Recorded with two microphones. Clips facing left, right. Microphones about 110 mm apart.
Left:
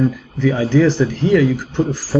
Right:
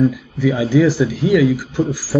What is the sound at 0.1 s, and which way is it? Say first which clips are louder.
Speech: even; 10° right (ahead or behind).